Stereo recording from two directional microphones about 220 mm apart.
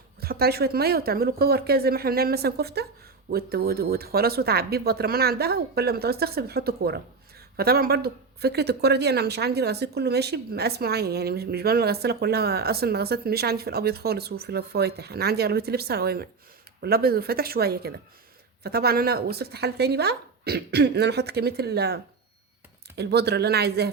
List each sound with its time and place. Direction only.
0.2 s speech: 45° right (ahead or behind)